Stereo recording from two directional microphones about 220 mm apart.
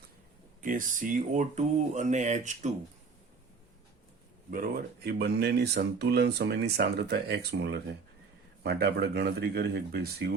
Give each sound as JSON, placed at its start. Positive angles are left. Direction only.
{"t": 0.6, "sound": "speech", "side_deg": -35}
{"t": 4.5, "sound": "speech", "side_deg": -40}